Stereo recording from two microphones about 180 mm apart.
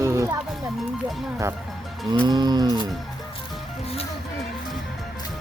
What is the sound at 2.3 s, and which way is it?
Livestock, 25° right (ahead or behind).